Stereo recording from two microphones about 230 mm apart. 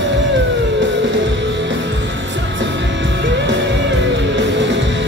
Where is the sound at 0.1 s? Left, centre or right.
Right.